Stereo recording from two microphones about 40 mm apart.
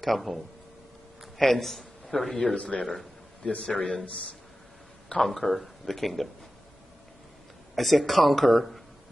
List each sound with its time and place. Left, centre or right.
0.0 s a man's voice: centre
2.5 s speech: left
2.8 s speech: centre
3.4 s speech: left
5.2 s speech: centre
7.7 s speech: centre